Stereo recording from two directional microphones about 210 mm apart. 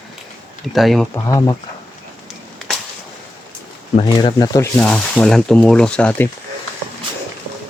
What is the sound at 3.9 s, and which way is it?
Speech, 25° left (ahead or behind).